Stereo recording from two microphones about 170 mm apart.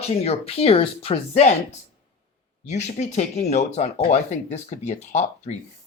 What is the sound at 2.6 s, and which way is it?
Speech, 40° left (ahead or behind).